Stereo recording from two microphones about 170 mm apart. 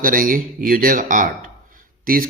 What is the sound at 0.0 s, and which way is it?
Speech, 55° right (ahead or behind).